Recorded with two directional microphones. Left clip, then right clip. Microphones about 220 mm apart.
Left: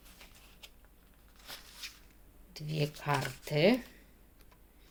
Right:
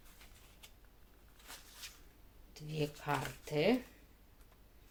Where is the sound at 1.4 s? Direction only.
30° left (ahead or behind).